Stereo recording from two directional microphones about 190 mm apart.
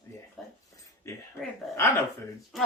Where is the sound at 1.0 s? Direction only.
15° left (ahead or behind).